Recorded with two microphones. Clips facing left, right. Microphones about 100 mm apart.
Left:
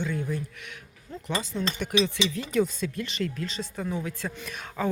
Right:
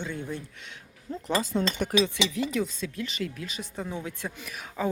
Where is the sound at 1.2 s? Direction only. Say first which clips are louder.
Right 3 dB; 50° right (ahead or behind).